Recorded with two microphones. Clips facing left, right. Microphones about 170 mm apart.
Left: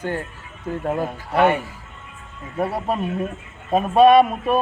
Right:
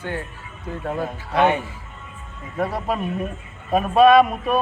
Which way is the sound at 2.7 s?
25° left (ahead or behind).